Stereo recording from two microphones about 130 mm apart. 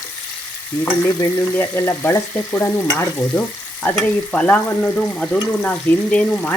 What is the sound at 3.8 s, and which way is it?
Stir, 15° left (ahead or behind).